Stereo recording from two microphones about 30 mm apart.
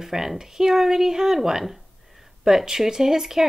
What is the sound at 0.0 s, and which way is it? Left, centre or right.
Speech, centre.